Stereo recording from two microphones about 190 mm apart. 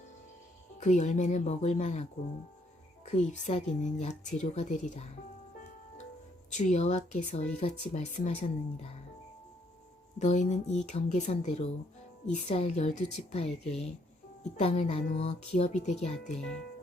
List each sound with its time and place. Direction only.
0.8 s speech: 40° left (ahead or behind)
3.1 s speech: 40° left (ahead or behind)
6.5 s speech: 40° left (ahead or behind)
10.2 s speech: 40° left (ahead or behind)
16.4 s speech: 5° left (ahead or behind)